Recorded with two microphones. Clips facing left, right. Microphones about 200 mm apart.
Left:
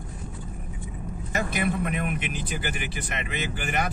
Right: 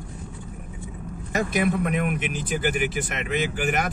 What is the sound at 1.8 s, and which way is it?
Speech, 45° right (ahead or behind).